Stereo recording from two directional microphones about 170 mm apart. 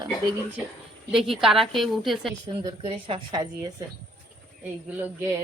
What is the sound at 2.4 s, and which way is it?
A woman's voice, 25° right (ahead or behind).